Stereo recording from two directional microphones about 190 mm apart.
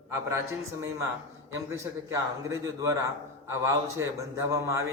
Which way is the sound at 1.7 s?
15° right (ahead or behind).